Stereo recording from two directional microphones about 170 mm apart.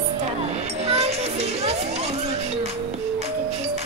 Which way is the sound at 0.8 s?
35° right (ahead or behind).